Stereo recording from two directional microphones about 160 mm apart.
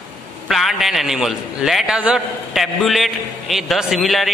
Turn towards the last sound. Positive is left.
turn(degrees=0)  # may be behind; listen again after turning